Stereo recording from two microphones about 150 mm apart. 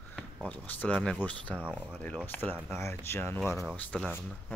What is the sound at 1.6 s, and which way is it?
Speech, 10° right (ahead or behind).